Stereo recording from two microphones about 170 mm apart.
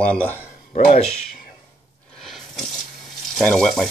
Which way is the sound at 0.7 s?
50° left (ahead or behind).